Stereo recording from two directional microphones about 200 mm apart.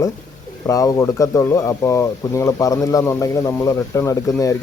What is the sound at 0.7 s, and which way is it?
Speech, 15° left (ahead or behind).